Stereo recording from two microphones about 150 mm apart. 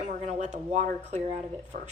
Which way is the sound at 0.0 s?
55° right (ahead or behind).